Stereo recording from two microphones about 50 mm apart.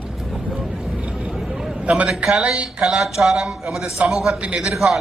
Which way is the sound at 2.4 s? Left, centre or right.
Right.